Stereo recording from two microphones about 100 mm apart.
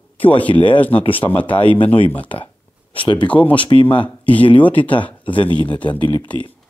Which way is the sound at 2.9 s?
60° left (ahead or behind).